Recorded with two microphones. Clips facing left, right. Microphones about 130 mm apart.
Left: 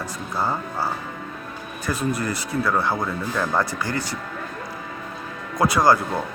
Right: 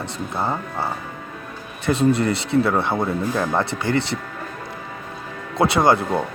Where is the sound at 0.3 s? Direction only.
25° right (ahead or behind).